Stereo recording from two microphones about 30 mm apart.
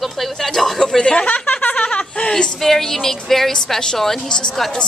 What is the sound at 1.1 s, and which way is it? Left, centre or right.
Speech, left.